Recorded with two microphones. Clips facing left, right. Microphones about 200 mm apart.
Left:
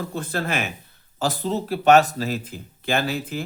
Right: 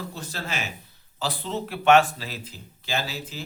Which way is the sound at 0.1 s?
55° left (ahead or behind).